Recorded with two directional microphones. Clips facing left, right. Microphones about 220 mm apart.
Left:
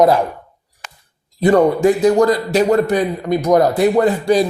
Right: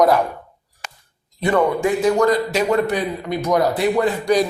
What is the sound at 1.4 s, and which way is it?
A man's voice, 40° left (ahead or behind).